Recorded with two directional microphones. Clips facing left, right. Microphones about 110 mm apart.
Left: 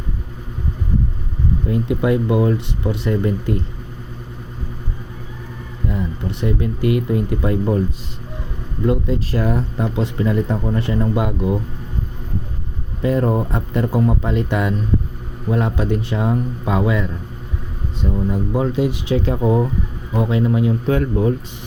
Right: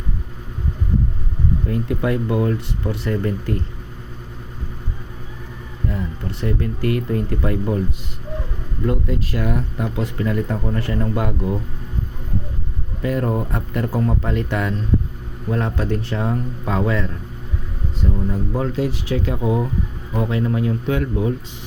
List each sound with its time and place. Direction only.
1.6 s speech: 20° left (ahead or behind)
5.9 s speech: 20° left (ahead or behind)
7.5 s speech: 30° left (ahead or behind)
9.3 s speech: 35° left (ahead or behind); by 11.6 s 20° left (ahead or behind)
13.0 s speech: 25° left (ahead or behind)
20.1 s speech: 20° left (ahead or behind)
20.8 s speech: 35° left (ahead or behind)